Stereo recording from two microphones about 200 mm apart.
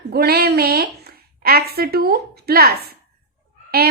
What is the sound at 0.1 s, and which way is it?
A woman's voice, 50° right (ahead or behind).